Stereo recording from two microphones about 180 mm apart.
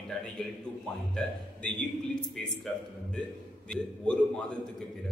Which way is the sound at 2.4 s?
5° left (ahead or behind).